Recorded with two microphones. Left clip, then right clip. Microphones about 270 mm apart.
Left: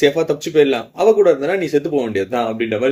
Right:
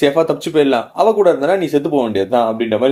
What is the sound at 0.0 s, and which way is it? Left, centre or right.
Speech, centre.